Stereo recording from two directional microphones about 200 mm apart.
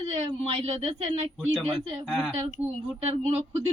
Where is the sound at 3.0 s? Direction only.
30° right (ahead or behind).